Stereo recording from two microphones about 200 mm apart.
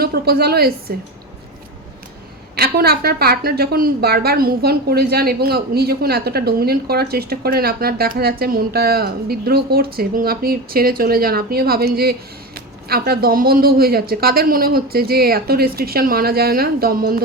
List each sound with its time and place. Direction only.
0.0 s a woman's voice: 50° right (ahead or behind)
2.6 s a woman's voice: 50° right (ahead or behind)